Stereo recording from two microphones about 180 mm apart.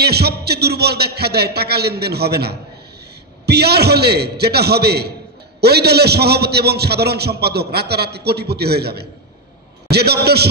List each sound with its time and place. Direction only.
0.0 s a man's voice: 65° right (ahead or behind)